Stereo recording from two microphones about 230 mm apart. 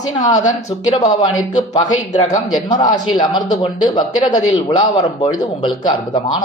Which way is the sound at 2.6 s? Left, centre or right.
Centre.